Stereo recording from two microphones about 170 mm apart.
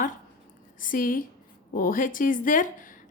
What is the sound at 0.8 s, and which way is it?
A woman's voice, 55° left (ahead or behind).